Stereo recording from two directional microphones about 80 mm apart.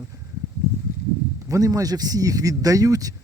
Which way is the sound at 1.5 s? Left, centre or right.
Right.